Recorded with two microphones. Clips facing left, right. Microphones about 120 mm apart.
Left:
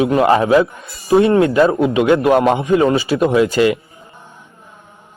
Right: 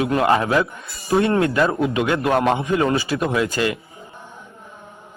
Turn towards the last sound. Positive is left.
turn(degrees=20)  # may be behind; listen again after turning